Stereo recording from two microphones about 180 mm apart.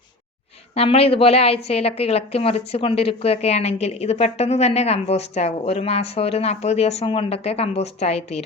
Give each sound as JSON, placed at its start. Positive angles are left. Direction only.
{"t": 0.7, "sound": "a woman's voice", "side_deg": 35}